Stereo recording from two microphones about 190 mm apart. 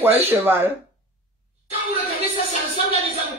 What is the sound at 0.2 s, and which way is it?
Speech, 10° right (ahead or behind).